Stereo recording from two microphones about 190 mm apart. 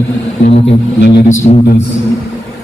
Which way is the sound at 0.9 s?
65° left (ahead or behind).